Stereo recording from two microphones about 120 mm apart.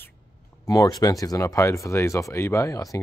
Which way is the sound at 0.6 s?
30° left (ahead or behind).